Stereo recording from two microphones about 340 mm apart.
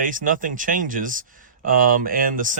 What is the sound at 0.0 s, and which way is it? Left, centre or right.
Speech, right.